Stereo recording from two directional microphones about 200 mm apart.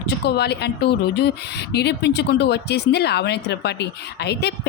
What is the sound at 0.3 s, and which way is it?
Speech, 55° left (ahead or behind).